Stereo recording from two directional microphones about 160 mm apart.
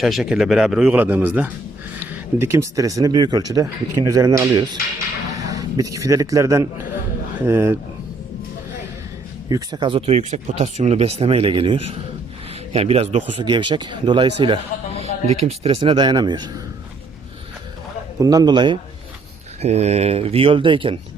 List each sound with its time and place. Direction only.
0.0 s a man's voice: centre (ahead or behind); by 7.8 s 15° right (ahead or behind)
9.5 s speech: 25° right (ahead or behind); by 13.4 s 40° right (ahead or behind)
13.4 s speech: 30° right (ahead or behind)
18.2 s speech: 25° right (ahead or behind)
19.6 s speech: 45° right (ahead or behind)